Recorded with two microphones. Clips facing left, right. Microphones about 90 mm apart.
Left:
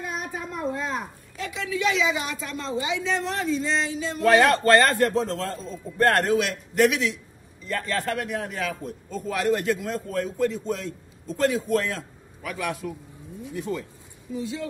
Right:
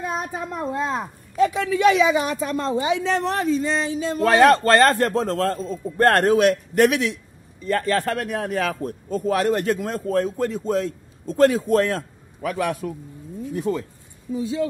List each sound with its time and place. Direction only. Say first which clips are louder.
0.0 s a child's voice: right 5 dB; 35° right (ahead or behind)